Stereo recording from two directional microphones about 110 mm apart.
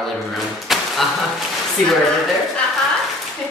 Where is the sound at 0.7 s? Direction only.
Centre (ahead or behind).